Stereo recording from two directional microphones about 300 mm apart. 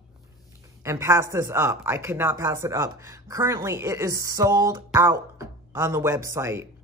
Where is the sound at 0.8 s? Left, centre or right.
Centre.